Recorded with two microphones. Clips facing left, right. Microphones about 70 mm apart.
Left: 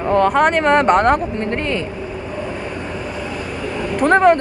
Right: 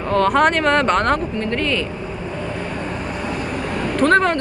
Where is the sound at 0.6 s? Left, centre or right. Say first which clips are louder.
Left 3 dB; centre.